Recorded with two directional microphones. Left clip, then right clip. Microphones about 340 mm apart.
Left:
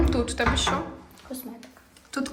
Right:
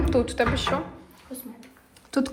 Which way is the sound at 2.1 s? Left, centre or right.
Centre.